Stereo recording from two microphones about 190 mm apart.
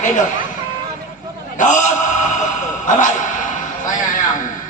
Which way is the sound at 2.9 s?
40° left (ahead or behind).